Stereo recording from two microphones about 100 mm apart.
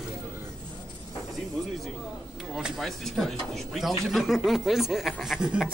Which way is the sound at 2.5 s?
Centre (ahead or behind).